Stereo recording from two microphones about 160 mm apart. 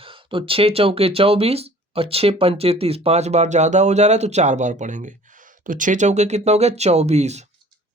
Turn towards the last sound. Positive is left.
turn(degrees=-45)  # may be behind; listen again after turning